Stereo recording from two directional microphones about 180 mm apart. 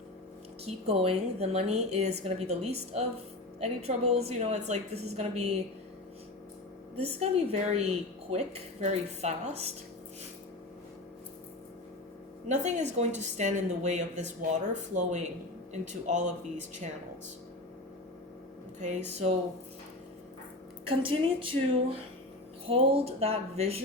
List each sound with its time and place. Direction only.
0.6 s a woman's voice: 35° right (ahead or behind)
6.9 s a woman's voice: 35° right (ahead or behind)
12.5 s a woman's voice: 40° right (ahead or behind)
15.7 s a woman's voice: 40° right (ahead or behind)
18.8 s speech: 45° right (ahead or behind)
20.8 s a woman's voice: 30° right (ahead or behind)